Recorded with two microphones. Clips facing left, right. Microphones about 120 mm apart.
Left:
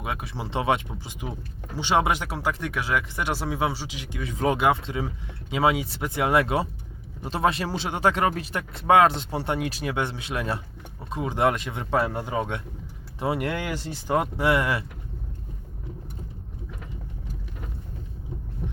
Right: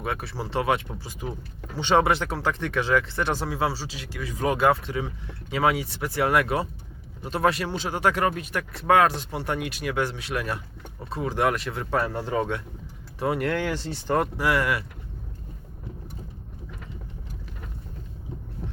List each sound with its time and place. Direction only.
0.0 s speech: 15° left (ahead or behind)